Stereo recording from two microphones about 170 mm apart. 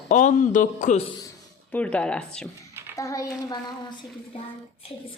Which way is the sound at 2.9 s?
20° left (ahead or behind).